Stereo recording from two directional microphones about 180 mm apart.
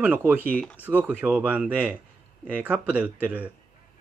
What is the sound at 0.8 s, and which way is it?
Speech, 10° right (ahead or behind).